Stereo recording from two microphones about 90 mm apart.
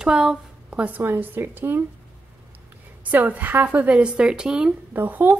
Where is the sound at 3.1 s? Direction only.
20° right (ahead or behind).